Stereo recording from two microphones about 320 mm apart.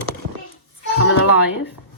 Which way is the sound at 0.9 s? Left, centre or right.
Left.